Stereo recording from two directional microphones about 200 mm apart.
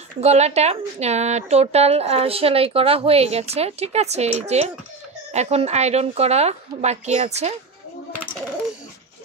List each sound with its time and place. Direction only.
0.2 s speech: 30° right (ahead or behind)